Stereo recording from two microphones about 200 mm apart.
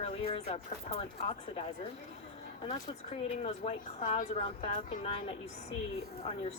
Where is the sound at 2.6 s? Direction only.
30° left (ahead or behind).